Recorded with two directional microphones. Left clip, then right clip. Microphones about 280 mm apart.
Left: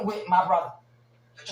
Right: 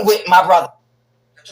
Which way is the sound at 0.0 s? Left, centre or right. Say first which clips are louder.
Right 12 dB; right.